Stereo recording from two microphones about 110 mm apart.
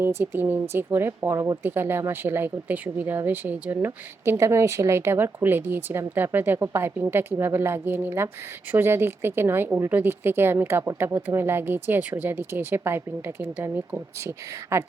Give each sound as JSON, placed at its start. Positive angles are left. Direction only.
{"t": 0.0, "sound": "speech", "side_deg": -20}